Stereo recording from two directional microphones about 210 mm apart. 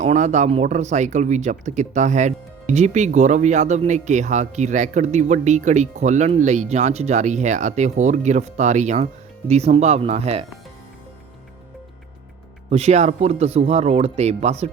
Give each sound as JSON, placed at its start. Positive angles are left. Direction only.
{"t": 0.0, "sound": "a man's voice", "side_deg": -35}
{"t": 12.7, "sound": "a man's voice", "side_deg": -30}